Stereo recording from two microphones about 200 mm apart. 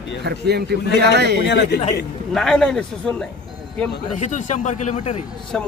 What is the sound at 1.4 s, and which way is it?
Speech, 60° left (ahead or behind).